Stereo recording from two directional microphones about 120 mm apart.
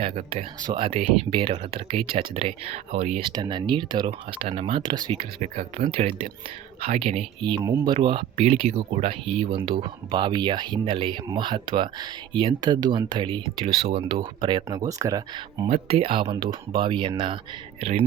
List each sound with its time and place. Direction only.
0.2 s speech: 70° right (ahead or behind)
0.6 s speech: 45° right (ahead or behind); by 3.2 s 65° right (ahead or behind)
3.2 s speech: 40° right (ahead or behind)
5.1 s speech: 75° right (ahead or behind); by 5.9 s 90° right
5.9 s speech: 55° right (ahead or behind)
7.9 s speech: 40° right (ahead or behind)
8.4 s speech: 65° right (ahead or behind); by 15.6 s 30° right (ahead or behind)
15.7 s speech: 50° right (ahead or behind)